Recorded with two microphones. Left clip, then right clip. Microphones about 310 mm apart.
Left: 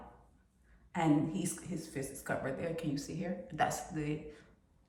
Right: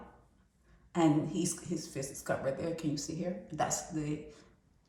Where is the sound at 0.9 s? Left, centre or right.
Centre.